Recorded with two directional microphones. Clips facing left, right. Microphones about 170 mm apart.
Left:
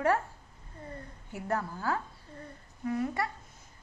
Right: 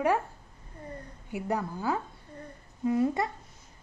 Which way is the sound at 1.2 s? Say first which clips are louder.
Right 2 dB; 15° right (ahead or behind).